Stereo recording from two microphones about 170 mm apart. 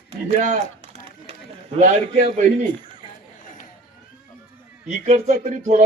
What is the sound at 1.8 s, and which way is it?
Speech, 45° right (ahead or behind).